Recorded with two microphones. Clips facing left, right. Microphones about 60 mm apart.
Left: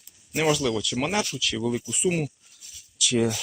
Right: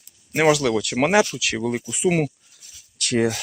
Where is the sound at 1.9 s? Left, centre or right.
Right.